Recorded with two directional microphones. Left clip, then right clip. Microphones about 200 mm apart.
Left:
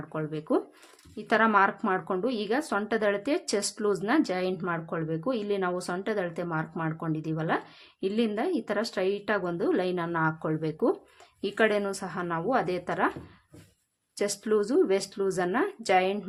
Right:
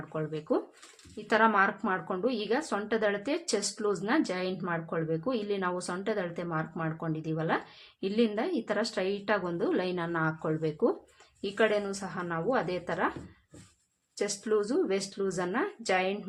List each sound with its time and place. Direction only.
0.1 s a woman's voice: 30° left (ahead or behind)
14.2 s a woman's voice: 30° left (ahead or behind)